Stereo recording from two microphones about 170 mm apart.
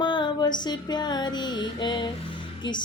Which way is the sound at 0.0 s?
25° left (ahead or behind).